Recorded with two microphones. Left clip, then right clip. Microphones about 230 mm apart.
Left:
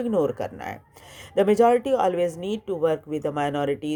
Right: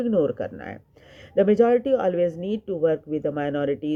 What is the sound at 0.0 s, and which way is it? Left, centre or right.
Speech, left.